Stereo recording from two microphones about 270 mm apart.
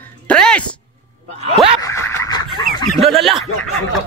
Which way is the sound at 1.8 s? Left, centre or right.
Centre.